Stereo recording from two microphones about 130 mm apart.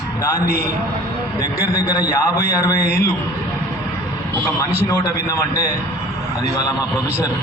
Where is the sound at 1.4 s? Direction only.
15° right (ahead or behind).